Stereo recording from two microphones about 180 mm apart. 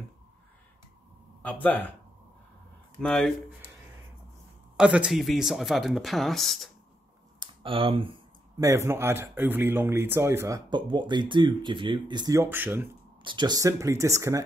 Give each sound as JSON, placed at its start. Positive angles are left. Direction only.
{"t": 1.4, "sound": "speech", "side_deg": 10}
{"t": 3.0, "sound": "speech", "side_deg": 5}
{"t": 4.7, "sound": "speech", "side_deg": -5}
{"t": 7.3, "sound": "speech", "side_deg": -30}
{"t": 8.5, "sound": "speech", "side_deg": -15}
{"t": 13.2, "sound": "speech", "side_deg": -25}